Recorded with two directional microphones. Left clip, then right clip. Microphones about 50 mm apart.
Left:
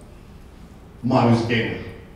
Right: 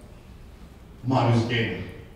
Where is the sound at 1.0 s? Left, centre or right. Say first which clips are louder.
Left 5 dB; centre.